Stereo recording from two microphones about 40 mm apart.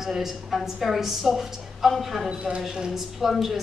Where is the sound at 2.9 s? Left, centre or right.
Centre.